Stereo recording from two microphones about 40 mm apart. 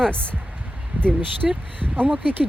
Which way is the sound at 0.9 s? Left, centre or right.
Right.